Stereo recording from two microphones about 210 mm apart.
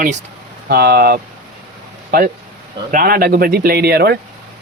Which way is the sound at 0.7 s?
50° right (ahead or behind).